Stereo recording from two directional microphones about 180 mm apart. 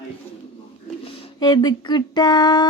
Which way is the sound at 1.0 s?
25° left (ahead or behind).